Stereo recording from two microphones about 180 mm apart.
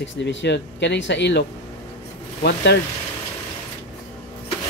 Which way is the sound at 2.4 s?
65° left (ahead or behind).